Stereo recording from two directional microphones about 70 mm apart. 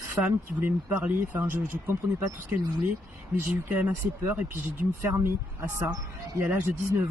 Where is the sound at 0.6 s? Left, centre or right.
Right.